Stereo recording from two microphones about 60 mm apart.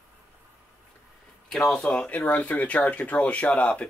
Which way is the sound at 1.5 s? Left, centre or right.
Centre.